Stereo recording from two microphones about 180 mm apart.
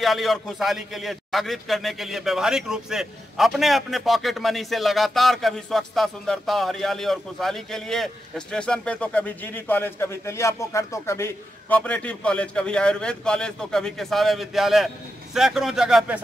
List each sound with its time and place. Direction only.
0.0 s a man's voice: centre (ahead or behind)